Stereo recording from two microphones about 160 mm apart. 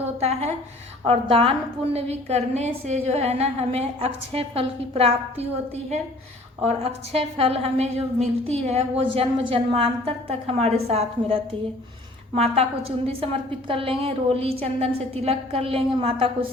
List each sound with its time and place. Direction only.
0.2 s a woman's voice: 40° right (ahead or behind)
6.6 s a woman's voice: 40° right (ahead or behind)
13.7 s a woman's voice: 35° right (ahead or behind)